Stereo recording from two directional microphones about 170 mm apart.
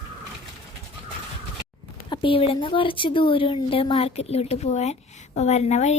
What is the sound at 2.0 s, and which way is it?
Speech, 30° left (ahead or behind).